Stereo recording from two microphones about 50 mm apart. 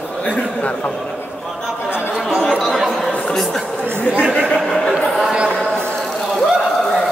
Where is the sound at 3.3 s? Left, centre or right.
Centre.